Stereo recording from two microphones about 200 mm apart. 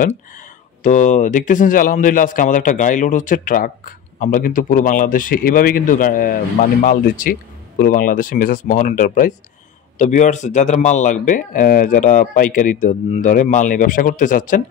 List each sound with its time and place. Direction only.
0.8 s a man's voice: 40° left (ahead or behind)